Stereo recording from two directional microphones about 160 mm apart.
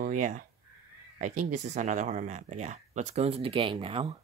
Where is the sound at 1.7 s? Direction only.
50° right (ahead or behind); by 4.1 s 35° right (ahead or behind).